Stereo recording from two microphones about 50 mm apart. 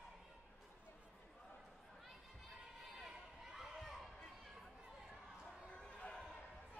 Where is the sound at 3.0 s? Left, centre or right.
Centre.